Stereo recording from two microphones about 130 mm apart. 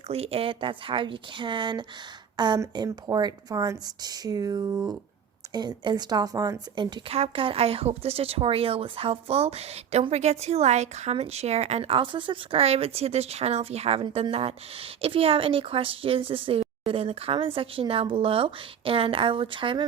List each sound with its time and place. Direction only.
0.1 s speech: 50° right (ahead or behind); by 7.0 s 30° right (ahead or behind)
7.1 s speech: 45° right (ahead or behind)